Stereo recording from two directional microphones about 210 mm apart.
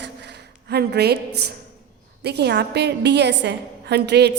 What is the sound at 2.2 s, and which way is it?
A woman's voice, 50° right (ahead or behind).